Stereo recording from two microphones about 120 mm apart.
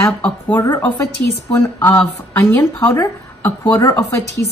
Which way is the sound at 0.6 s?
25° left (ahead or behind).